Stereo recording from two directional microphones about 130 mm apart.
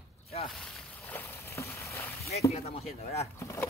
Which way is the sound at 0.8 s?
15° left (ahead or behind).